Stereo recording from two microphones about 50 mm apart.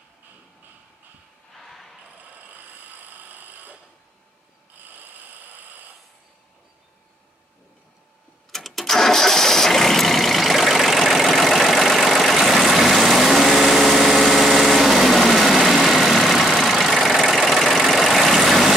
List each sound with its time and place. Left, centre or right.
1.5 s a sound: centre
2.1 s vehicle: right
8.5 s engine starting: centre
17.9 s vehicle: centre